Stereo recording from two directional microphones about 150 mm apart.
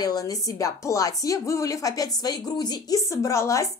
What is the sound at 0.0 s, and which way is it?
A woman's voice, 25° left (ahead or behind).